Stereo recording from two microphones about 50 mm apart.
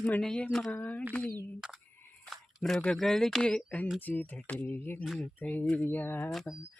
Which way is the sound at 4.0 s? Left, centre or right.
Left.